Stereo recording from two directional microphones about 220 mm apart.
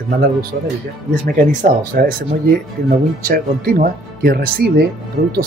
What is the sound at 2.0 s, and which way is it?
Speech, 40° right (ahead or behind).